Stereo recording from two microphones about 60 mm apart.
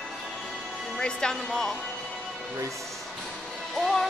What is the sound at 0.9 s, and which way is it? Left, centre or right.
Speech, centre.